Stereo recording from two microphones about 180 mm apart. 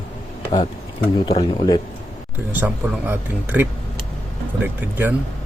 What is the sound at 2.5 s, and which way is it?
Speech, 10° right (ahead or behind).